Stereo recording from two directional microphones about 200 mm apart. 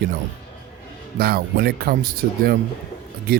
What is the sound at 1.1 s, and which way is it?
Speech, 50° right (ahead or behind).